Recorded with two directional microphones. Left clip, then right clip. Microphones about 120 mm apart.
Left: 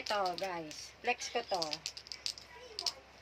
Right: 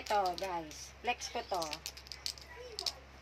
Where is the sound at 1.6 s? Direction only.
45° right (ahead or behind).